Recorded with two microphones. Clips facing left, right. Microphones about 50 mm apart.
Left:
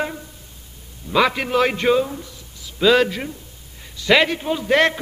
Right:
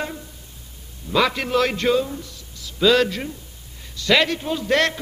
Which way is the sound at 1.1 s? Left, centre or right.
Centre.